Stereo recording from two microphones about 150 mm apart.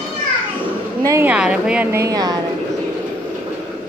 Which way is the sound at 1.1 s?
15° right (ahead or behind).